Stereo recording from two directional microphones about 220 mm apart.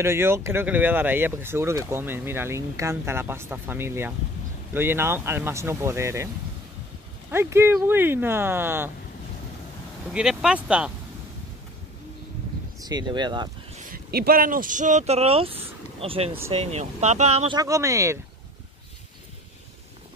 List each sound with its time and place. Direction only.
0.0 s speech: 10° right (ahead or behind)
10.0 s speech: 5° right (ahead or behind)
12.8 s speech: 20° right (ahead or behind)
13.8 s speech: 40° right (ahead or behind)
17.6 s speech: 15° right (ahead or behind)